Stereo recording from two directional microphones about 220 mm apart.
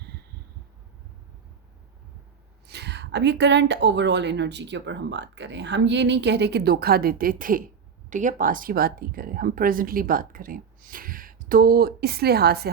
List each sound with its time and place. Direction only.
2.6 s a woman's voice: 50° right (ahead or behind)